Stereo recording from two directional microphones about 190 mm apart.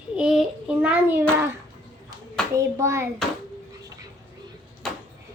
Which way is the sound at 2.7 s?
15° right (ahead or behind).